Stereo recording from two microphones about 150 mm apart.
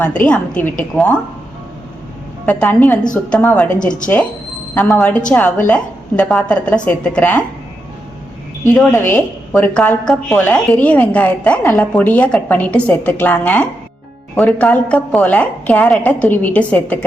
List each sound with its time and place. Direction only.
0.0 s a woman's voice: 10° left (ahead or behind)
2.5 s a woman's voice: 10° left (ahead or behind)
8.9 s a woman's voice: 15° left (ahead or behind)